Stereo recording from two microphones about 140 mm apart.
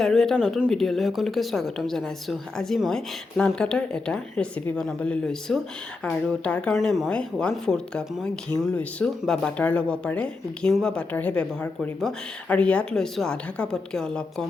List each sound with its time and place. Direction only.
0.0 s a woman's voice: centre (ahead or behind)